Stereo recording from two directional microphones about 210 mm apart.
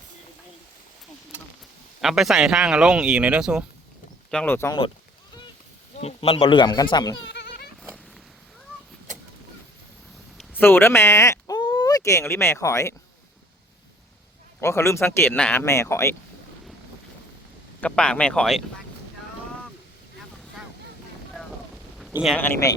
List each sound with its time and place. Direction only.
2.0 s a man's voice: centre (ahead or behind)
4.3 s speech: 5° left (ahead or behind)
6.0 s speech: 30° left (ahead or behind)
7.3 s goat: 50° left (ahead or behind)
10.6 s speech: 10° left (ahead or behind)
14.6 s speech: 15° left (ahead or behind)
17.7 s a man's voice: 5° left (ahead or behind)
21.9 s a sound: centre (ahead or behind)